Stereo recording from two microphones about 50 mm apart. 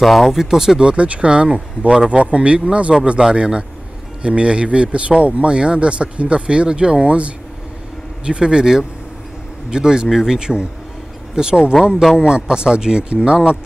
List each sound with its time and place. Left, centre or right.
0.0 s speech: centre